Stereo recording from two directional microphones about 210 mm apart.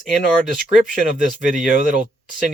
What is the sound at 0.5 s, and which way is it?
Speech, 40° right (ahead or behind).